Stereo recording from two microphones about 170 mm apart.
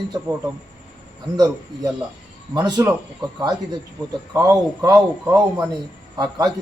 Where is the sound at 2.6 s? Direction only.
25° right (ahead or behind).